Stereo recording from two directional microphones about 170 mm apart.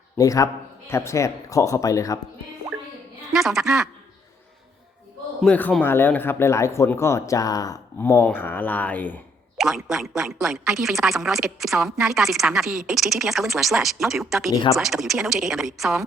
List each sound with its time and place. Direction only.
0.2 s speech: 20° left (ahead or behind)
3.3 s a woman's voice: centre (ahead or behind)
5.4 s speech: 10° left (ahead or behind)
9.6 s a woman's voice: centre (ahead or behind)
14.5 s speech: 20° left (ahead or behind)
14.8 s a woman's voice: centre (ahead or behind)